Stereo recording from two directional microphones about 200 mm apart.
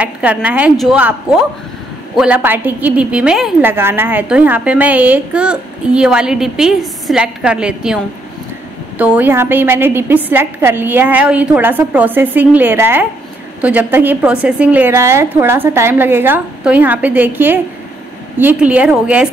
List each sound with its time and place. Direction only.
0.0 s a woman's voice: 5° right (ahead or behind)